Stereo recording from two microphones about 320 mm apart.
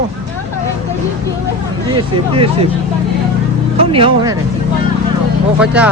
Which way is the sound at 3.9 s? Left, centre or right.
Centre.